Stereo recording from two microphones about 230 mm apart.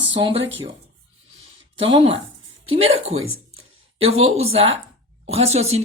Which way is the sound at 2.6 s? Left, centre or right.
Right.